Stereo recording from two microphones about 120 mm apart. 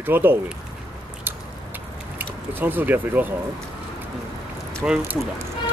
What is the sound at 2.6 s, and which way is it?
Speech, 15° right (ahead or behind).